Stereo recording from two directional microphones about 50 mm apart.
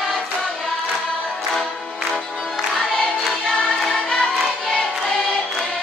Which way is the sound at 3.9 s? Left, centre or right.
Centre.